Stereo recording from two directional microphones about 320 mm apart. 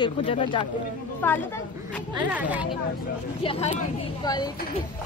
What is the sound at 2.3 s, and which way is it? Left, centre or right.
Speech, centre.